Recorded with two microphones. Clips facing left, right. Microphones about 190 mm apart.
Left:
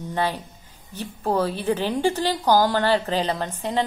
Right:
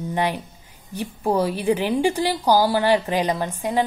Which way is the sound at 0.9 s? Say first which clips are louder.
Right 2 dB; 15° right (ahead or behind).